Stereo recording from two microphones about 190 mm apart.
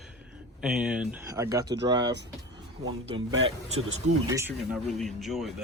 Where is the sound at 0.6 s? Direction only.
5° right (ahead or behind).